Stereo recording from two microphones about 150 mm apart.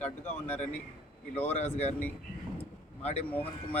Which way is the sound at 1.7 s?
50° left (ahead or behind).